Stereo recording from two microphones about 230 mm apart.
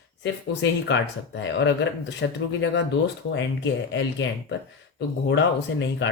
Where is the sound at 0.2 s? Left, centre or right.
Left.